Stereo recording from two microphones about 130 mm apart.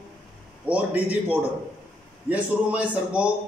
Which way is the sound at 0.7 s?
10° right (ahead or behind).